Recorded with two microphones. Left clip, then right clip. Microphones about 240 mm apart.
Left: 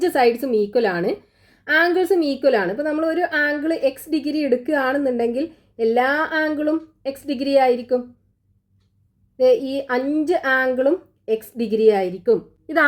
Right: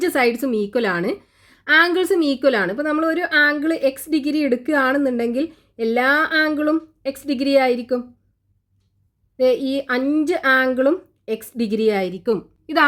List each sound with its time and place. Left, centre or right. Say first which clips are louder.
0.0 s a woman's voice: left 1 dB; right
9.4 s a woman's voice: left 1 dB; right